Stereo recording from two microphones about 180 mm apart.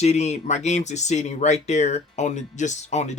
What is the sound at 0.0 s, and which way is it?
Speech, 40° left (ahead or behind).